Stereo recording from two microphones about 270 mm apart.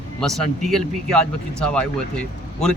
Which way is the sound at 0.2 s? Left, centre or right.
Centre.